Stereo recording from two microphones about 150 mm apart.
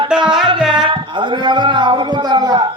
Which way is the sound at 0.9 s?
35° right (ahead or behind).